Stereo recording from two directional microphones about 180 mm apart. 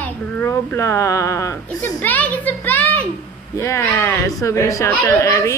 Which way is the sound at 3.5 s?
15° left (ahead or behind).